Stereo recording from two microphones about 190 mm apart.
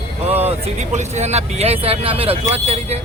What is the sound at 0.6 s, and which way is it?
Speech, 35° right (ahead or behind).